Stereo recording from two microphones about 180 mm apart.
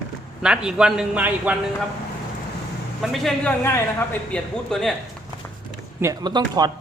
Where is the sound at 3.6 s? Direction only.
15° left (ahead or behind).